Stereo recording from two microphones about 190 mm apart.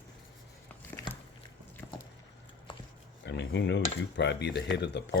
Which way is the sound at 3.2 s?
65° left (ahead or behind).